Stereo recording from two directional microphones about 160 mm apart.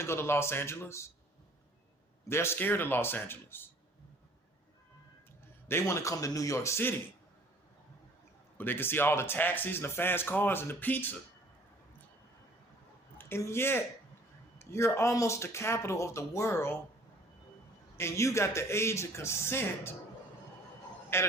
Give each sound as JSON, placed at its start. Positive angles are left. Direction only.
{"t": 0.0, "sound": "speech", "side_deg": 15}
{"t": 2.2, "sound": "speech", "side_deg": 15}
{"t": 5.6, "sound": "a man's voice", "side_deg": 15}
{"t": 8.5, "sound": "speech", "side_deg": 10}
{"t": 13.1, "sound": "speech", "side_deg": 15}
{"t": 17.9, "sound": "speech", "side_deg": 15}
{"t": 21.1, "sound": "speech", "side_deg": 15}